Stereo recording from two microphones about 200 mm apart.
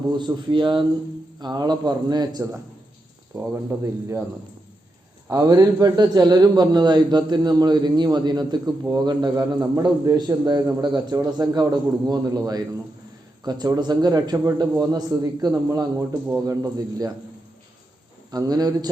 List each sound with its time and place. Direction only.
0.2 s a man's voice: 20° right (ahead or behind)
5.3 s a man's voice: 20° right (ahead or behind)
18.3 s a man's voice: 20° right (ahead or behind)